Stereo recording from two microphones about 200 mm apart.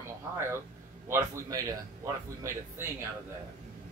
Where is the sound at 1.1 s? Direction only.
15° right (ahead or behind).